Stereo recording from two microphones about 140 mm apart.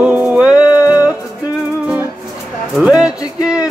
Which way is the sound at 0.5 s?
30° left (ahead or behind).